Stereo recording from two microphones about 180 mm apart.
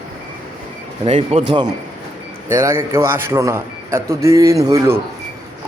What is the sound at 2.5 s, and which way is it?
A man's voice, 15° right (ahead or behind).